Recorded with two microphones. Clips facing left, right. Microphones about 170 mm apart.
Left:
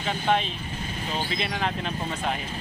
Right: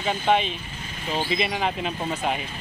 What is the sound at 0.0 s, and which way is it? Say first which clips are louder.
Speech: right 3 dB; 5° right (ahead or behind).